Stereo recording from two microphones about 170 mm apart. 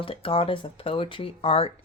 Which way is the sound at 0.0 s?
30° left (ahead or behind).